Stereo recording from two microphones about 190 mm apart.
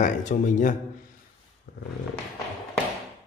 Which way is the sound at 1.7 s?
55° left (ahead or behind).